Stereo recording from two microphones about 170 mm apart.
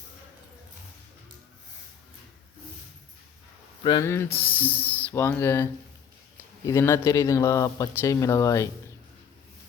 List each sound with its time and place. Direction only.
3.8 s speech: 20° left (ahead or behind)
6.7 s speech: 15° left (ahead or behind)